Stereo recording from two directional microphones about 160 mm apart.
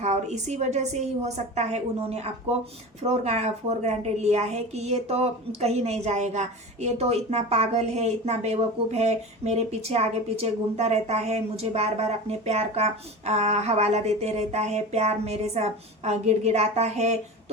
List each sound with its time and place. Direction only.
0.0 s a woman's voice: 45° right (ahead or behind)